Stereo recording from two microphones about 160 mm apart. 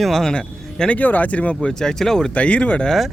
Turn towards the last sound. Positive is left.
turn(degrees=0)  # may be behind; listen again after turning